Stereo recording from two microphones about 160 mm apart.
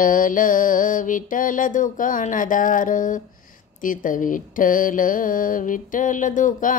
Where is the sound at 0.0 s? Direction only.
55° left (ahead or behind).